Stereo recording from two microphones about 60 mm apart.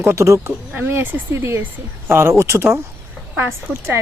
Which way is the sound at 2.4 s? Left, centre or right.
Right.